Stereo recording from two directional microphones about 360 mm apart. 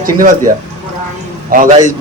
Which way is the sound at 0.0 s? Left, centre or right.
Right.